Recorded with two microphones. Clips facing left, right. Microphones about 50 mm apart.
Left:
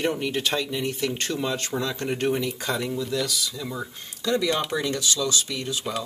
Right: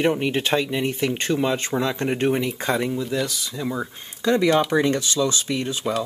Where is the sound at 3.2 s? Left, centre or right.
Right.